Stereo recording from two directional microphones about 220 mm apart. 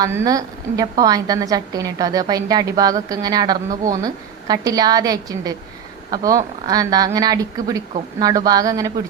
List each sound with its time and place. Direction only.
0.0 s a woman's voice: 15° right (ahead or behind)